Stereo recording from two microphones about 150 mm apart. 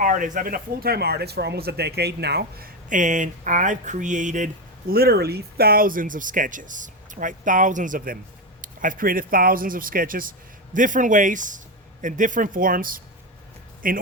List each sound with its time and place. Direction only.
0.0 s speech: 60° right (ahead or behind); by 3.0 s 90° right
3.0 s speech: 55° right (ahead or behind)
4.9 s speech: 90° right; by 14.0 s 70° right (ahead or behind)